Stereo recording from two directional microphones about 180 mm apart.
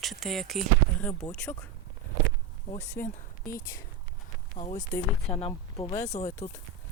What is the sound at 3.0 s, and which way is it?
Speech, 55° left (ahead or behind).